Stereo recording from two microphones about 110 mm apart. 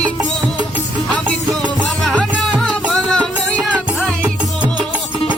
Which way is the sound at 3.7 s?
10° right (ahead or behind).